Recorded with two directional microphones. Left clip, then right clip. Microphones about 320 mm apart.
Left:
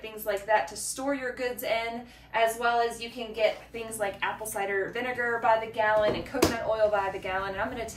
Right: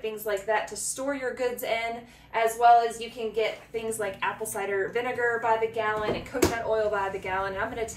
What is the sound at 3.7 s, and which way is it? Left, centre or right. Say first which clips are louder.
A woman's voice: right 2 dB; centre.